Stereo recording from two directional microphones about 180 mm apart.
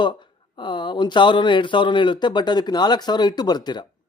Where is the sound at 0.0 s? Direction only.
25° left (ahead or behind).